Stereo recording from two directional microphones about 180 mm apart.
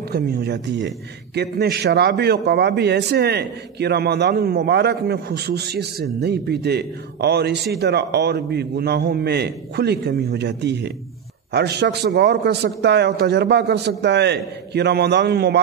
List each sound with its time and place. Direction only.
0.1 s a man's voice: 60° right (ahead or behind)